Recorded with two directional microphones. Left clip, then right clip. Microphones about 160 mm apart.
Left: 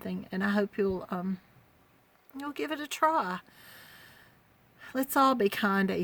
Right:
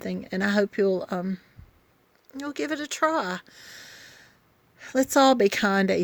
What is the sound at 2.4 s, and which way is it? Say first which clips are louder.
Speech: right 5 dB; 30° right (ahead or behind).